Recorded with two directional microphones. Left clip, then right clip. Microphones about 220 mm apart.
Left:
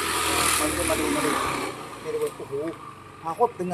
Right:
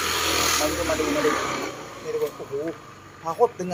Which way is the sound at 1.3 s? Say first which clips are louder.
Even; 45° left (ahead or behind).